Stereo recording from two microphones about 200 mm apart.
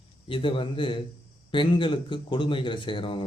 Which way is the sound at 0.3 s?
25° left (ahead or behind).